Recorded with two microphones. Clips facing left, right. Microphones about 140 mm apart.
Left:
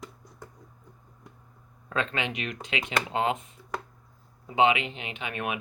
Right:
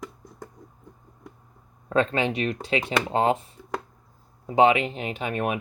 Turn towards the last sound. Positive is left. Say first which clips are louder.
# right 6 dB
turn(degrees=-40)  # may be behind; listen again after turning